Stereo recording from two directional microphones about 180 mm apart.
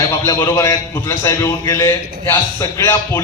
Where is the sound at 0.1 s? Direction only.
15° left (ahead or behind).